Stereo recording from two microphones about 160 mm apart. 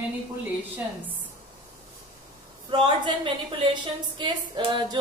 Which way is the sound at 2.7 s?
30° right (ahead or behind).